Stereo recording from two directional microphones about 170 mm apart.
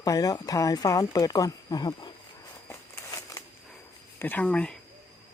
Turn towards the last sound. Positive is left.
turn(degrees=5)  # may be behind; listen again after turning